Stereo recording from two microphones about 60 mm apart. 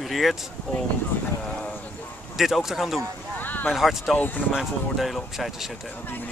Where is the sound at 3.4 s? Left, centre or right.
Left.